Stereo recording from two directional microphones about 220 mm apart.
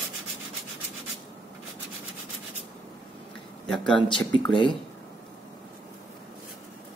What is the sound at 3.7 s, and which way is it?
Speech, 5° left (ahead or behind).